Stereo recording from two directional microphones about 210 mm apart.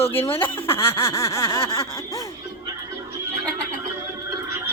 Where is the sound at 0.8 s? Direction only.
10° left (ahead or behind).